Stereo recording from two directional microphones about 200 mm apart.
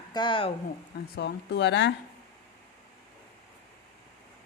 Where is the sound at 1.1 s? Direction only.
60° left (ahead or behind).